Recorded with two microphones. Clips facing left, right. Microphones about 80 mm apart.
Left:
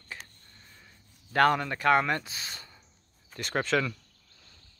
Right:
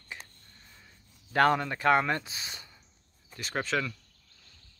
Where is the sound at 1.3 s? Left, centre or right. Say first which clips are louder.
Left 1 dB; right.